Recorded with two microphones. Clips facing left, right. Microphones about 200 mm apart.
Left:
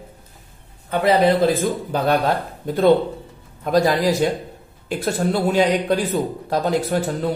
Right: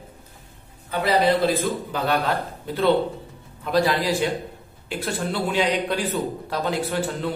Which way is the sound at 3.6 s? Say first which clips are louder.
Left 4 dB; 45° left (ahead or behind).